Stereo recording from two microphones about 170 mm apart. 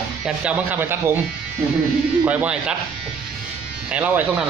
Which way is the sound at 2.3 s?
5° right (ahead or behind).